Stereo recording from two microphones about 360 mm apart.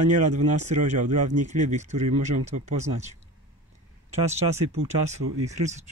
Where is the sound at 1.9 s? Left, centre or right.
Right.